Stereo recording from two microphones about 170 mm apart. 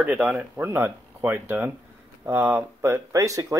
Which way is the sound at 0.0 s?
5° right (ahead or behind).